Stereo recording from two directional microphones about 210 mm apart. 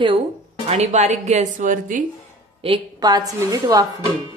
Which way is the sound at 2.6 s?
20° right (ahead or behind).